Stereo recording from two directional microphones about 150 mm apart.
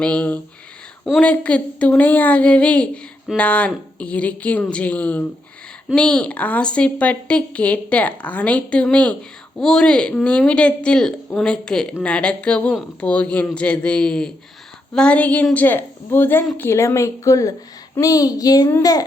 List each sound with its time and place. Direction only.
0.0 s speech: 10° left (ahead or behind); by 19.0 s 25° left (ahead or behind)